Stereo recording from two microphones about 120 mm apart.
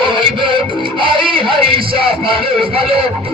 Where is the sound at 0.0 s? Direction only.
45° right (ahead or behind).